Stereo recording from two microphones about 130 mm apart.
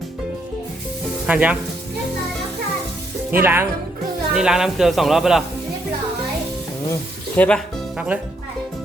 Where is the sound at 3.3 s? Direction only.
15° right (ahead or behind).